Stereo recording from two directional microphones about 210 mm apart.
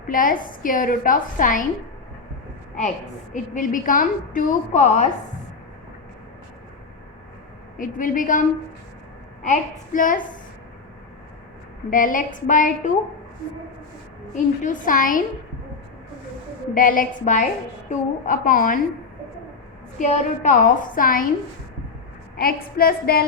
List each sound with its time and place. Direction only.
0.1 s a woman's voice: 40° left (ahead or behind)
3.3 s a woman's voice: 40° left (ahead or behind)
7.8 s a woman's voice: 40° left (ahead or behind)
11.9 s a woman's voice: 40° left (ahead or behind)
14.3 s a woman's voice: 40° left (ahead or behind)
16.7 s a woman's voice: 40° left (ahead or behind)
20.0 s a woman's voice: 35° left (ahead or behind)
22.4 s speech: 45° left (ahead or behind)